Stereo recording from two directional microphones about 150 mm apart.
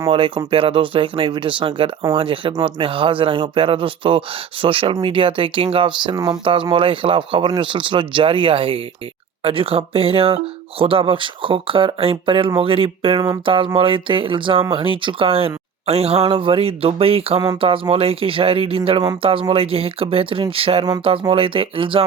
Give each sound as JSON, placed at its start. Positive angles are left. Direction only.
{"t": 0.1, "sound": "speech", "side_deg": -35}
{"t": 13.2, "sound": "speech", "side_deg": -25}
{"t": 13.7, "sound": "speech", "side_deg": -35}
{"t": 17.4, "sound": "speech", "side_deg": -25}
{"t": 17.7, "sound": "speech", "side_deg": -40}